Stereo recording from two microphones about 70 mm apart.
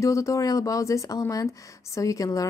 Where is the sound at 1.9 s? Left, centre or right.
Left.